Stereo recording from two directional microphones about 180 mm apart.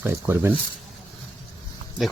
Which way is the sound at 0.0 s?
10° right (ahead or behind).